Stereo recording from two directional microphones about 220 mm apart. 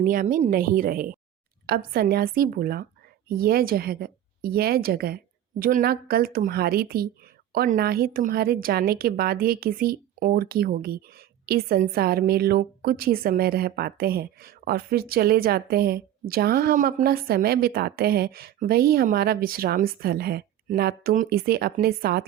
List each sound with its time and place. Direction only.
0.0 s a woman's voice: 40° right (ahead or behind)